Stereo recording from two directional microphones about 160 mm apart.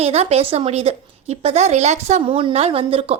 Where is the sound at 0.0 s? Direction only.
40° right (ahead or behind).